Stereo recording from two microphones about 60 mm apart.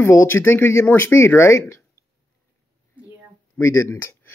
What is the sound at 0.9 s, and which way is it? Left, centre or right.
Speech, left.